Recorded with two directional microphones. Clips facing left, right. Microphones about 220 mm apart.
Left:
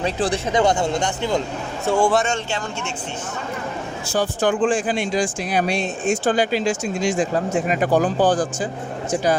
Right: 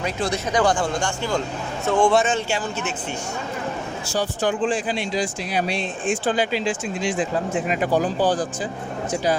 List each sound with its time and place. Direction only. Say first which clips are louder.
0.0 s speech: left 3 dB; 30° left (ahead or behind)
1.8 s a man's voice: even; 10° left (ahead or behind)
4.1 s speech: left 3 dB; 50° left (ahead or behind)